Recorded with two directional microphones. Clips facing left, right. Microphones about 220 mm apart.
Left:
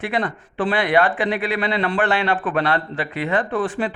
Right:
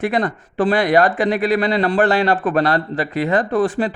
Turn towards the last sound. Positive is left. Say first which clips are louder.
# right 4 dB
turn(degrees=-40)  # may be behind; listen again after turning